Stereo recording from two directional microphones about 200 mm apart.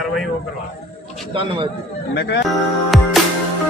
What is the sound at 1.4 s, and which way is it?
Speech, 25° right (ahead or behind).